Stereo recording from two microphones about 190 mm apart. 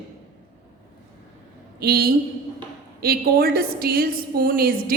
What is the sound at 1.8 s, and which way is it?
A woman's voice, 55° right (ahead or behind).